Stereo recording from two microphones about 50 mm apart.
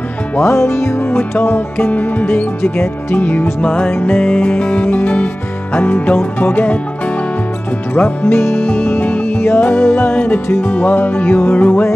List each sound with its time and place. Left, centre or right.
0.4 s music: left
1.9 s speech: left
3.6 s music: left
5.7 s speech: left
8.2 s music: left
8.8 s music: left
9.4 s music: left
10.1 s music: left
10.7 s speech: left